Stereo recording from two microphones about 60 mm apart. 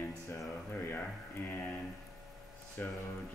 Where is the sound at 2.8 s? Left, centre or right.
Left.